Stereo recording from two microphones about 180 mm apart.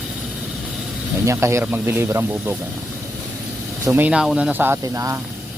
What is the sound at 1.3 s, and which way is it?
Speech, 15° right (ahead or behind).